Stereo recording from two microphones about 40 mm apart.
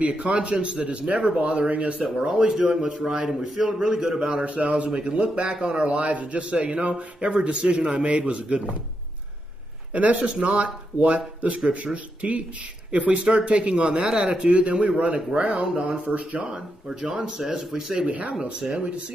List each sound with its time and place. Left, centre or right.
0.0 s a man's voice: right
2.1 s speech: centre
3.3 s speech: centre
4.3 s a man's voice: right
9.9 s a man's voice: right
16.5 s speech: right
18.0 s a man's voice: right